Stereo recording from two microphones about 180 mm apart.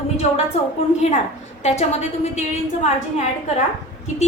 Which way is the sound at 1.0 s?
35° left (ahead or behind).